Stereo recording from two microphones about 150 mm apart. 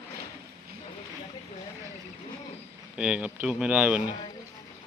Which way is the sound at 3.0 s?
5° right (ahead or behind).